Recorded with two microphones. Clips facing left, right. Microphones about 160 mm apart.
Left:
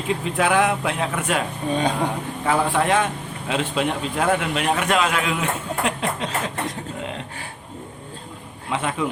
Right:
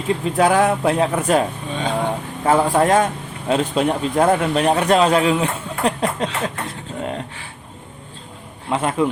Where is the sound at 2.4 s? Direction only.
40° right (ahead or behind).